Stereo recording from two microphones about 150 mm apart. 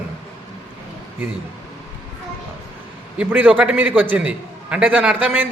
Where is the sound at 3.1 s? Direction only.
10° right (ahead or behind).